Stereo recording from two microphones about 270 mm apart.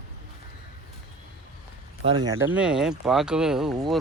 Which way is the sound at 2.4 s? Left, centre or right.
Centre.